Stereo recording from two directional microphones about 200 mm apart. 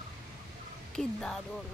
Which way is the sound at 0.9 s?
5° left (ahead or behind).